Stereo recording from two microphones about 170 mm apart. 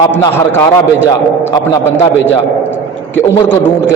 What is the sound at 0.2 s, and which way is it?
A man's voice, 15° left (ahead or behind).